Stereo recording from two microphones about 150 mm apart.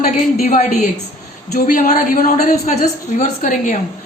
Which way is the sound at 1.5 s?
65° left (ahead or behind).